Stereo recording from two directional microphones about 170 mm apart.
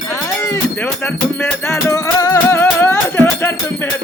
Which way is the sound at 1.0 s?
15° left (ahead or behind).